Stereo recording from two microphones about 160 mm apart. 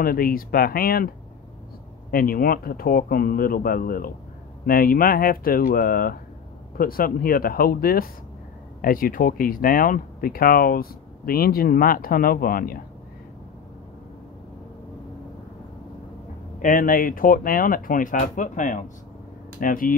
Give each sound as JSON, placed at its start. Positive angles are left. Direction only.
{"t": 0.0, "sound": "speech", "side_deg": 65}
{"t": 16.6, "sound": "speech", "side_deg": 60}
{"t": 19.6, "sound": "speech", "side_deg": 60}